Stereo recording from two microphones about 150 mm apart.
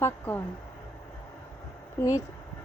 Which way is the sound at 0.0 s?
15° left (ahead or behind).